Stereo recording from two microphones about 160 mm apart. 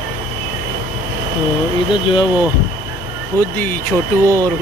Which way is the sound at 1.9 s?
30° left (ahead or behind).